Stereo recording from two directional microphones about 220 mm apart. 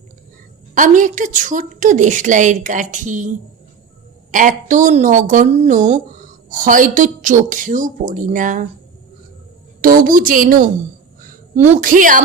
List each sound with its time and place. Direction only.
0.7 s a woman's voice: 35° right (ahead or behind)
9.8 s a woman's voice: 40° right (ahead or behind)